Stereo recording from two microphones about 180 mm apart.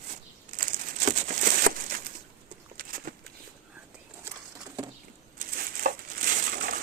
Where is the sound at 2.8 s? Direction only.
55° right (ahead or behind).